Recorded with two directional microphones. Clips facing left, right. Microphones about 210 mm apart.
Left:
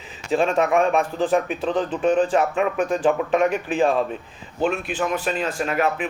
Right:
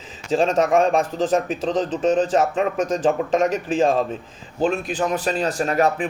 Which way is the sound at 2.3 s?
35° right (ahead or behind).